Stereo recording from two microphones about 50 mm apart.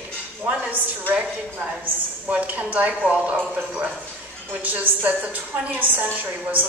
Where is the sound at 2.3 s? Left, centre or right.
Right.